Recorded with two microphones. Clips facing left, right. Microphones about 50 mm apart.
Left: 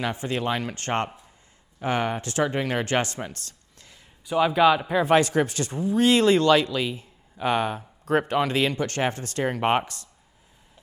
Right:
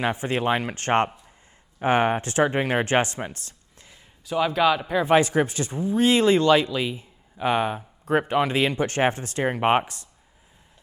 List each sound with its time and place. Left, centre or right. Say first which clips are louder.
0.0 s speech: right 3 dB; right
4.3 s speech: left 2 dB; centre
5.1 s speech: right 2 dB; centre